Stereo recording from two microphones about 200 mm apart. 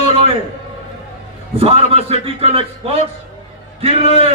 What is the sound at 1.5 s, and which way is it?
A man's voice, 30° right (ahead or behind).